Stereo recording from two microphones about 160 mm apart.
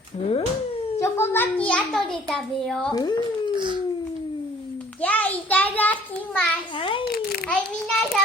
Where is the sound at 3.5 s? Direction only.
30° right (ahead or behind).